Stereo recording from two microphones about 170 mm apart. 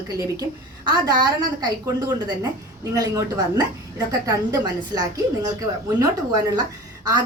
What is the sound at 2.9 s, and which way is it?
A woman's voice, 20° right (ahead or behind).